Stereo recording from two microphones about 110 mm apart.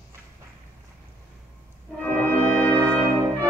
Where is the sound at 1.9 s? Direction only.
15° left (ahead or behind).